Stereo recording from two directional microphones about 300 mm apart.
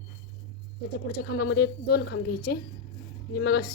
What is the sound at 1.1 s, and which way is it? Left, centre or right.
A woman's voice, left.